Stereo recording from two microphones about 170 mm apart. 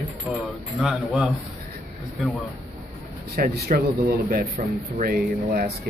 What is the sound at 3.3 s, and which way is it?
Speech, 60° right (ahead or behind).